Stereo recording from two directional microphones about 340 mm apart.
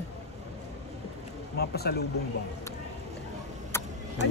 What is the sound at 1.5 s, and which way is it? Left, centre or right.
Speech, left.